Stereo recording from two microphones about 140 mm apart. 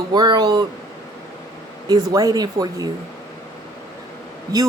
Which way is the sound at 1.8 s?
30° right (ahead or behind).